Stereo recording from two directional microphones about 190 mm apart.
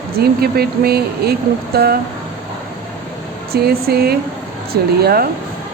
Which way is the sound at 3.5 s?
55° right (ahead or behind).